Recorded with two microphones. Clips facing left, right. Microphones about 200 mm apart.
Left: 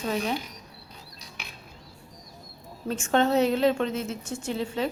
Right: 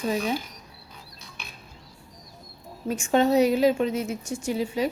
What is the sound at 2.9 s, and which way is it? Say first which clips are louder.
A woman's voice: right 2 dB; 10° right (ahead or behind).